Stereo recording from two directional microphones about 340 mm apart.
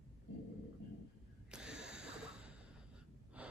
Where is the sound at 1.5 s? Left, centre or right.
Centre.